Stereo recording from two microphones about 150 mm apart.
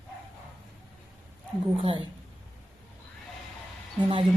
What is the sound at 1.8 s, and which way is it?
Speech, 35° right (ahead or behind).